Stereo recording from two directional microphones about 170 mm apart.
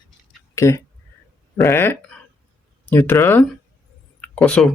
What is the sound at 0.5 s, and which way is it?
Speech, 15° left (ahead or behind).